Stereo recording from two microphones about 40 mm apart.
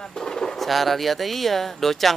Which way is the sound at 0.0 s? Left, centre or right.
Centre.